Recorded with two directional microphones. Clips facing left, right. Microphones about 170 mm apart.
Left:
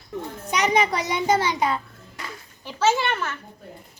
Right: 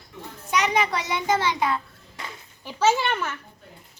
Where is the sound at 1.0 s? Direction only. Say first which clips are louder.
Left 2 dB; 15° left (ahead or behind).